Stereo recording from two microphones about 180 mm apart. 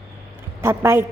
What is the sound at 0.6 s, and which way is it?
Speech, 15° right (ahead or behind).